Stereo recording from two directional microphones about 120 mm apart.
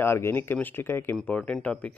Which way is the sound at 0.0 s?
20° left (ahead or behind).